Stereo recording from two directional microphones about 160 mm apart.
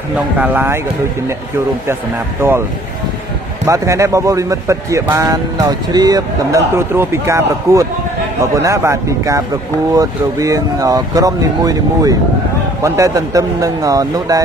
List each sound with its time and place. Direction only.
0.4 s speech: 10° right (ahead or behind)
3.6 s a man's voice: 20° right (ahead or behind)